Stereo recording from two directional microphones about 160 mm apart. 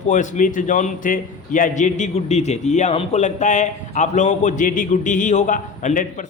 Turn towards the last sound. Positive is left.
turn(degrees=50)  # may be behind; listen again after turning